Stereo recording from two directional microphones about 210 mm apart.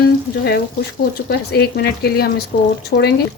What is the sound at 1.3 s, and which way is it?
Speech, 50° left (ahead or behind).